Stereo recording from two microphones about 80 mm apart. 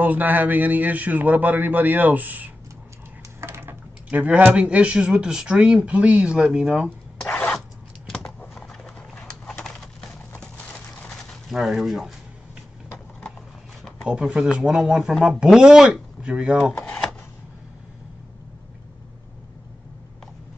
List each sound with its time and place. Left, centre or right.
0.0 s a man's voice: right
3.3 s typing: right
4.1 s speech: centre
7.2 s zipper: centre
8.4 s clip-clop: centre
11.1 s a sound: centre
11.5 s speech: centre
14.0 s speech: centre